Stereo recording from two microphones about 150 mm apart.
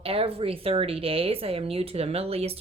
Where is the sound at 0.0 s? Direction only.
40° right (ahead or behind).